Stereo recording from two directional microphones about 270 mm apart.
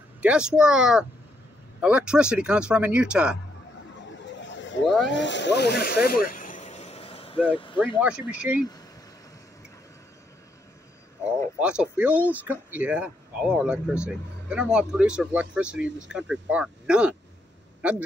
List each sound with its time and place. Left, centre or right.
0.2 s speech: centre
4.4 s vehicle: left
5.0 s a sound: left; by 7.3 s centre
7.4 s speech: centre
8.3 s speech: centre
11.6 s speech: centre